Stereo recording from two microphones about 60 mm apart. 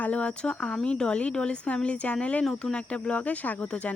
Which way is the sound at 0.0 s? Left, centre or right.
Left.